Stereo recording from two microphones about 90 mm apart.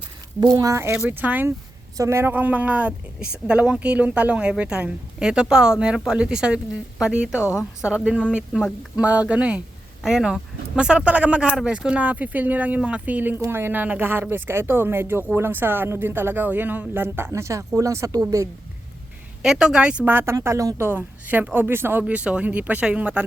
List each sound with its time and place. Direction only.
0.3 s speech: 45° right (ahead or behind)
0.9 s speech: 15° right (ahead or behind)
2.0 s speech: 30° right (ahead or behind)
2.3 s speech: 15° right (ahead or behind); by 18.4 s 40° right (ahead or behind)
19.4 s speech: 5° right (ahead or behind)
20.3 s speech: 35° right (ahead or behind)
22.0 s speech: 15° right (ahead or behind)